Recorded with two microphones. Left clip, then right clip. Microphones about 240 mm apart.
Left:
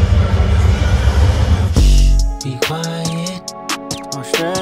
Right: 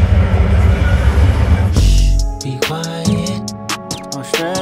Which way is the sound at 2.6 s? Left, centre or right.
Centre.